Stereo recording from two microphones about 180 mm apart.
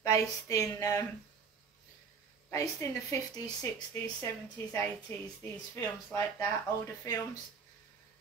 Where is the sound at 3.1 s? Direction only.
20° left (ahead or behind).